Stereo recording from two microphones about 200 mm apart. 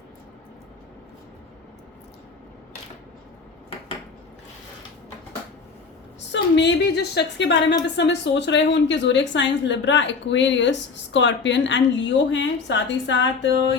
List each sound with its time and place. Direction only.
6.3 s a woman's voice: 60° left (ahead or behind)